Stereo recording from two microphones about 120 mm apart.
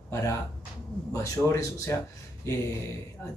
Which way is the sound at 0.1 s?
25° left (ahead or behind).